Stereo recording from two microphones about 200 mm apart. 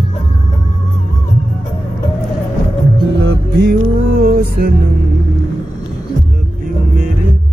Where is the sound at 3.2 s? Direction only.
60° right (ahead or behind).